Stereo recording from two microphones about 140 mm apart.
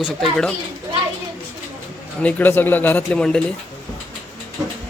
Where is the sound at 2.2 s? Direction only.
10° left (ahead or behind).